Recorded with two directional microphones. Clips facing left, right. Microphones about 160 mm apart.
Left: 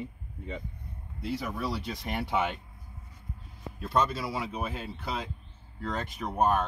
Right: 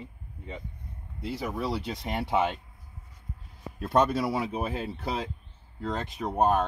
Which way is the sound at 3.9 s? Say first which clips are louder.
Right 4 dB; 65° right (ahead or behind).